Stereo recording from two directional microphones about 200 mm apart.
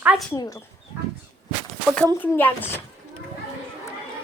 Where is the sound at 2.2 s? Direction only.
10° left (ahead or behind).